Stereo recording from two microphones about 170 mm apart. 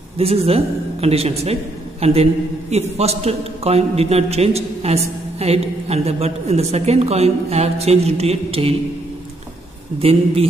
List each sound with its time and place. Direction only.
0.2 s a man's voice: 35° right (ahead or behind)
10.0 s a man's voice: 35° right (ahead or behind)